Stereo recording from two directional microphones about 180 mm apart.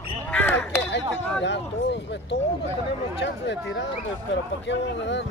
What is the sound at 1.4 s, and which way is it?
Speech, 75° left (ahead or behind).